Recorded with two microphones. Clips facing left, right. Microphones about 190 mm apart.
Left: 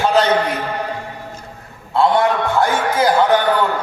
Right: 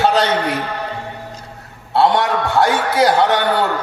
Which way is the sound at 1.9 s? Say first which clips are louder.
Even; 75° right (ahead or behind).